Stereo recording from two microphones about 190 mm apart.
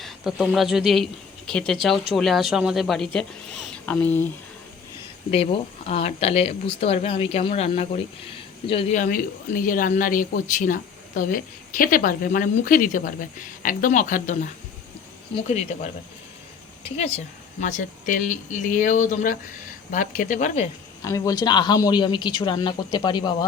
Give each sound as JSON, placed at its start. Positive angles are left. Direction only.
{"t": 0.0, "sound": "speech", "side_deg": 0}
{"t": 5.3, "sound": "speech", "side_deg": 30}
{"t": 9.0, "sound": "speech", "side_deg": 45}
{"t": 17.6, "sound": "speech", "side_deg": 40}
{"t": 21.0, "sound": "speech", "side_deg": 20}